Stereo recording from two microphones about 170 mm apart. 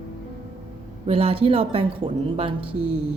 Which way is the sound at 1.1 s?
35° right (ahead or behind).